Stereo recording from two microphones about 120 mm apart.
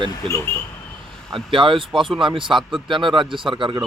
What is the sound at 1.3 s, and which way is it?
Speech, 45° right (ahead or behind).